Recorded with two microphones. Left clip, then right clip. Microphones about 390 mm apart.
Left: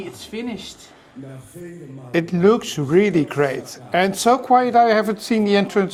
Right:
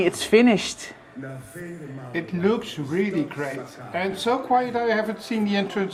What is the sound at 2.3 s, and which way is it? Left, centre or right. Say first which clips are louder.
Speech: left 7 dB; left.